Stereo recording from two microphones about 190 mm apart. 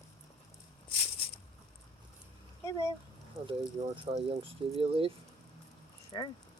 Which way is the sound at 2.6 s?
15° left (ahead or behind).